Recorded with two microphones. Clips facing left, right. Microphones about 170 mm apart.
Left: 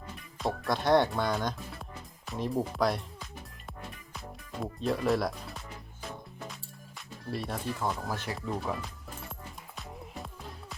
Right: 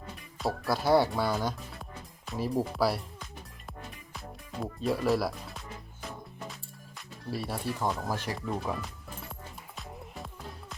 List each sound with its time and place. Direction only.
0.3 s speech: centre (ahead or behind)
4.6 s speech: centre (ahead or behind)
7.3 s speech: 5° right (ahead or behind); by 8.3 s 20° right (ahead or behind)
8.4 s speech: centre (ahead or behind)